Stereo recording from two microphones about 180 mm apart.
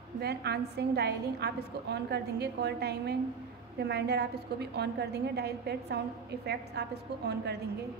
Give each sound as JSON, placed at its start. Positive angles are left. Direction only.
{"t": 0.2, "sound": "a woman's voice", "side_deg": -65}